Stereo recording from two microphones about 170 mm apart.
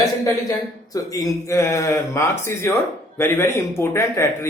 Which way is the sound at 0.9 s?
20° left (ahead or behind).